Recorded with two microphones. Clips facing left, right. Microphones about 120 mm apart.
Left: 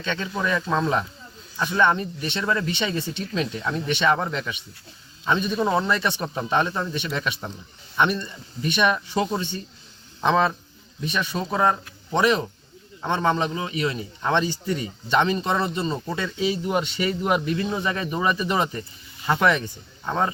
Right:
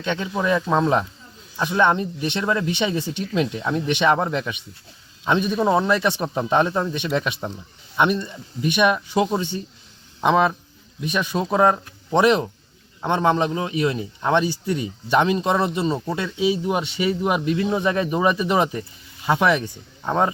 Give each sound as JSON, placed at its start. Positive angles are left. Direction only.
{"t": 0.0, "sound": "speech", "side_deg": -15}
{"t": 6.2, "sound": "speech", "side_deg": -25}